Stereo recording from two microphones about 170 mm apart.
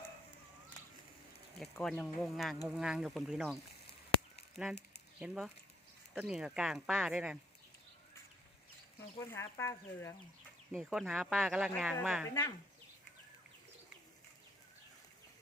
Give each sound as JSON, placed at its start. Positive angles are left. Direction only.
{"t": 1.8, "sound": "speech", "side_deg": 0}
{"t": 9.1, "sound": "speech", "side_deg": 15}
{"t": 10.8, "sound": "speech", "side_deg": 0}
{"t": 12.3, "sound": "speech", "side_deg": 20}